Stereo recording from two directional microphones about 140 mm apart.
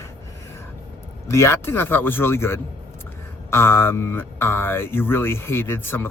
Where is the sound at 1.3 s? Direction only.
20° left (ahead or behind).